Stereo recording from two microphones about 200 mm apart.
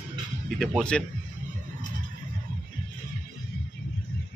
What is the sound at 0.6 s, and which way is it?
Speech, 5° left (ahead or behind).